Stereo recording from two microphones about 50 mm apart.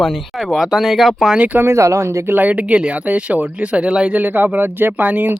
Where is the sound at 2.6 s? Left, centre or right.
Right.